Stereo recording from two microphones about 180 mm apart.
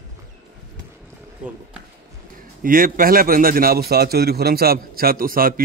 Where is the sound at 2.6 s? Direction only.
50° right (ahead or behind).